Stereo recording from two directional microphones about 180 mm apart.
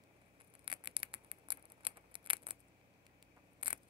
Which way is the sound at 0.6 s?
30° right (ahead or behind).